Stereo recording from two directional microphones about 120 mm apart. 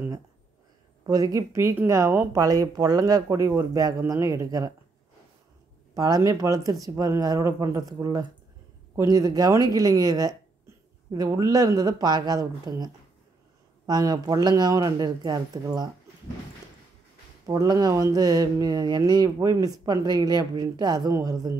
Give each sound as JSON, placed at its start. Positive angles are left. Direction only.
{"t": 1.0, "sound": "speech", "side_deg": -30}
{"t": 5.9, "sound": "mantra", "side_deg": -30}
{"t": 17.5, "sound": "mantra", "side_deg": -30}